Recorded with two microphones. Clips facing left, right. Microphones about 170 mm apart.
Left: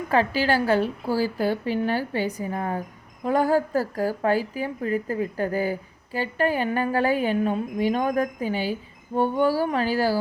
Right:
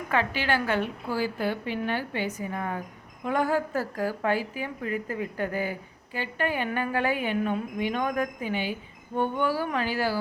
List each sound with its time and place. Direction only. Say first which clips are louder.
0.1 s a woman's voice: left 5 dB; 35° left (ahead or behind)